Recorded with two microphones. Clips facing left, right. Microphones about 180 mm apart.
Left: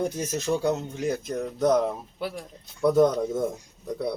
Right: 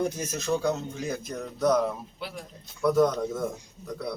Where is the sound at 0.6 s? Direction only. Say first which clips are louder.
Left 3 dB; 20° left (ahead or behind).